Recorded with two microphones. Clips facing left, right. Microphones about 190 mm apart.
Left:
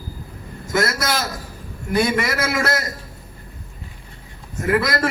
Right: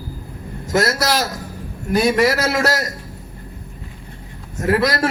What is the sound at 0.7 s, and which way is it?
Speech, 35° right (ahead or behind).